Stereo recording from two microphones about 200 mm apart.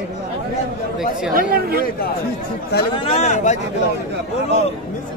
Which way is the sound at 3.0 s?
35° left (ahead or behind).